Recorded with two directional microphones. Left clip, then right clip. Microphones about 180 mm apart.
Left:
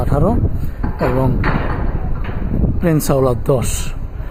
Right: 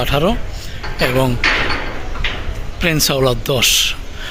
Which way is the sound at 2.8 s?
15° left (ahead or behind).